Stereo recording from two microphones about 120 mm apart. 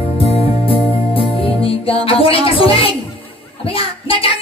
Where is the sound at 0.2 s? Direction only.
50° left (ahead or behind).